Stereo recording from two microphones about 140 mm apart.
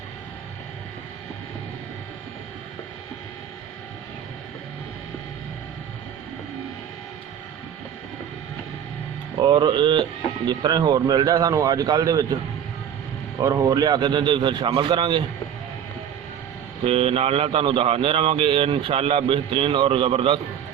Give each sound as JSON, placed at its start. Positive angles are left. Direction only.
{"t": 9.4, "sound": "speech", "side_deg": -30}
{"t": 13.4, "sound": "speech", "side_deg": -25}
{"t": 16.8, "sound": "speech", "side_deg": -40}